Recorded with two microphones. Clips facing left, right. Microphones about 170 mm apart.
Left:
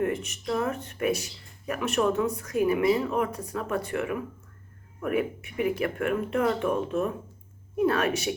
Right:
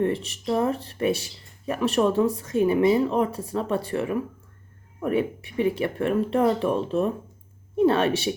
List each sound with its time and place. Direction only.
0.0 s speech: 30° right (ahead or behind)